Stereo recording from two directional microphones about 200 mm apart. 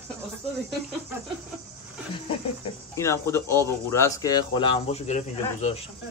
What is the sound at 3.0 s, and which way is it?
Speech, 15° left (ahead or behind).